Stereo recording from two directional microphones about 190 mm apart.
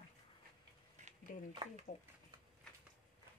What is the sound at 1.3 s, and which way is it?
Speech, 45° left (ahead or behind).